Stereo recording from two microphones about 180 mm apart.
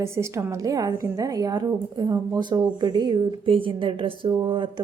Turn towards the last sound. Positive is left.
turn(degrees=-30)  # may be behind; listen again after turning